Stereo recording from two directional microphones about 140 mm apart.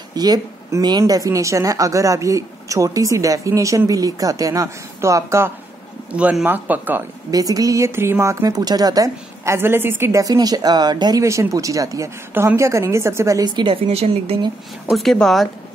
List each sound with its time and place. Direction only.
0.1 s speech: 30° right (ahead or behind)
6.1 s speech: 10° right (ahead or behind)
7.2 s speech: 25° right (ahead or behind); by 14.5 s 45° right (ahead or behind)
14.9 s speech: centre (ahead or behind)